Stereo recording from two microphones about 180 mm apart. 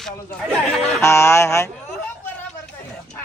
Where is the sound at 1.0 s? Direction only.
15° left (ahead or behind).